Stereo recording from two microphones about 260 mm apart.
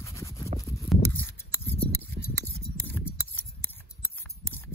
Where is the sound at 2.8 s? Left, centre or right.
Centre.